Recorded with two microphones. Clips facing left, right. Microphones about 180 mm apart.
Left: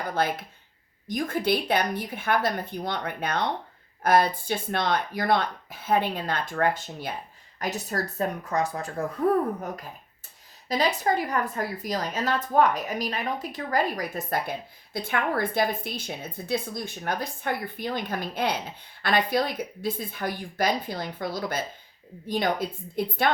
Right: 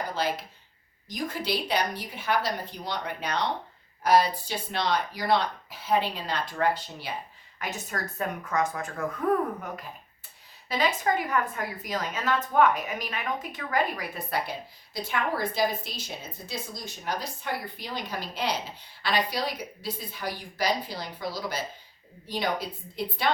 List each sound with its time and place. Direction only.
0.1 s a woman's voice: 55° left (ahead or behind); by 9.0 s 35° left (ahead or behind)
10.7 s a woman's voice: 40° left (ahead or behind)